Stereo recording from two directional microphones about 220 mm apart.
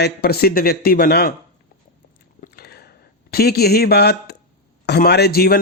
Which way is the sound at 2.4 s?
45° left (ahead or behind).